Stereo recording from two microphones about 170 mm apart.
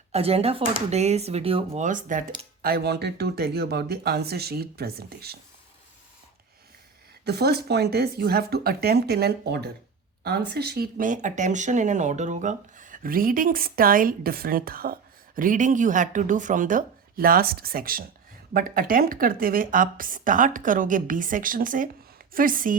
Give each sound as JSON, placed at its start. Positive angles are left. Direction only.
{"t": 0.1, "sound": "speech", "side_deg": -35}
{"t": 2.6, "sound": "speech", "side_deg": -65}
{"t": 7.3, "sound": "a woman's voice", "side_deg": -70}